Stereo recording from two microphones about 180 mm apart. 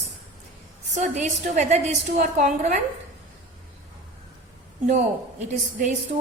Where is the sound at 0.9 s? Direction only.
40° right (ahead or behind).